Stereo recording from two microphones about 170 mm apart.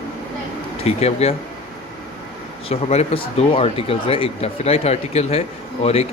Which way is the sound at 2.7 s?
35° left (ahead or behind).